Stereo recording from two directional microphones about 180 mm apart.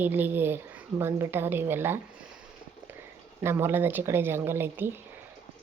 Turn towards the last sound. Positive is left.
turn(degrees=-10)  # may be behind; listen again after turning